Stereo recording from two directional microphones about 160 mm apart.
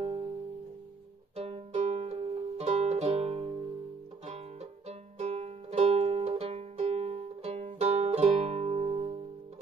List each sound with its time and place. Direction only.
1.4 s music: 45° right (ahead or behind)
4.8 s music: 40° right (ahead or behind)